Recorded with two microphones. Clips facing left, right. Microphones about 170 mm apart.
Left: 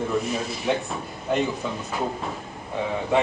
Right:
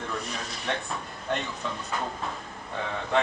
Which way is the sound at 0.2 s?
5° left (ahead or behind).